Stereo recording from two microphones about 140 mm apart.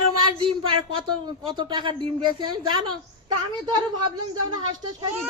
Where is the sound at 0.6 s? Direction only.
35° right (ahead or behind).